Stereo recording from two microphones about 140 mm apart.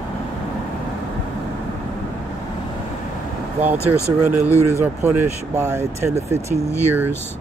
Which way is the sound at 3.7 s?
20° left (ahead or behind).